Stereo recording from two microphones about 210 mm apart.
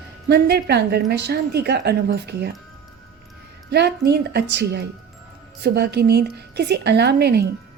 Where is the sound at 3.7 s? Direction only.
50° right (ahead or behind).